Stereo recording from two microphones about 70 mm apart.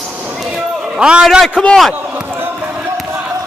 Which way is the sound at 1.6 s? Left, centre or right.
Centre.